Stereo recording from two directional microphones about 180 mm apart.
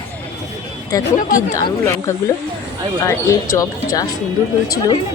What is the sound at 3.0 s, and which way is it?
Speech, 15° left (ahead or behind).